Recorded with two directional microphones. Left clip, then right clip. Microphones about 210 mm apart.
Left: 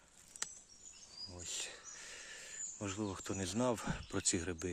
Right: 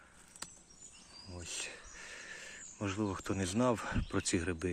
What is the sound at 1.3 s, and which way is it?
Speech, centre (ahead or behind).